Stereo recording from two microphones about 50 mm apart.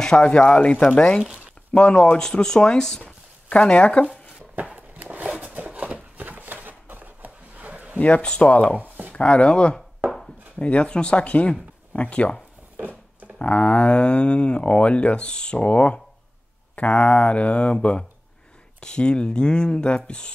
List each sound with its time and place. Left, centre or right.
0.0 s speech: centre
3.4 s speech: left
4.6 s a sound: right
8.0 s speech: left
12.7 s a sound: right
13.4 s speech: left
18.8 s speech: centre